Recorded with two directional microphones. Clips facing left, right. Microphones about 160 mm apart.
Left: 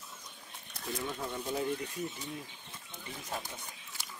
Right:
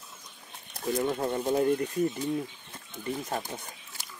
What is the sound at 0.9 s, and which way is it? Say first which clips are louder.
Speech: right 9 dB; 55° right (ahead or behind).